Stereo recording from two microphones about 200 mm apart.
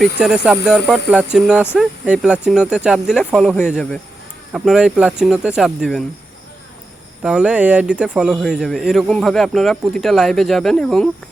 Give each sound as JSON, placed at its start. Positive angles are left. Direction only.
{"t": 0.0, "sound": "speech", "side_deg": -5}
{"t": 7.2, "sound": "speech", "side_deg": -5}